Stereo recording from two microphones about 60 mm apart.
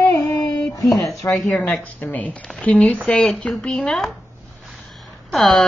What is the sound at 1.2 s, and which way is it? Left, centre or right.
Speech, left.